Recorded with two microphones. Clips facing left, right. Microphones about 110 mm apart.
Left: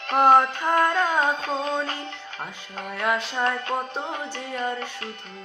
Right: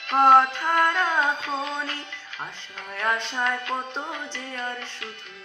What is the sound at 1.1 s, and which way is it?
Music, 40° left (ahead or behind).